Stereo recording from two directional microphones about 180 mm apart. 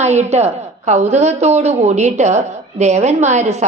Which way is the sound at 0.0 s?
40° right (ahead or behind).